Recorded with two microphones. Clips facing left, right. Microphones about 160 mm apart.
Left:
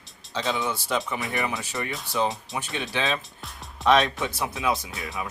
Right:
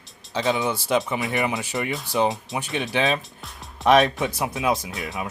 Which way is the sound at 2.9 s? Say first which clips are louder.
Right 5 dB; 20° right (ahead or behind).